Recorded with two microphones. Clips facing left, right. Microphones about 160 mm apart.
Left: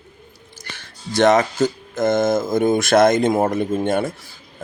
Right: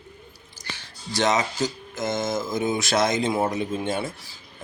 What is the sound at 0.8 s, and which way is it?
Speech, 55° left (ahead or behind).